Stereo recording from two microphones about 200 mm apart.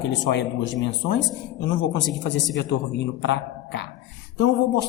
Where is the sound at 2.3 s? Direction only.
60° left (ahead or behind).